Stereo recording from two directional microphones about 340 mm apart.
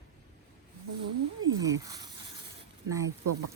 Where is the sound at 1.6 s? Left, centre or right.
Centre.